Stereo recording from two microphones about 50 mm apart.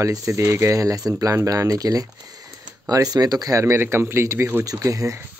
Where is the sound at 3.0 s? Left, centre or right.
Right.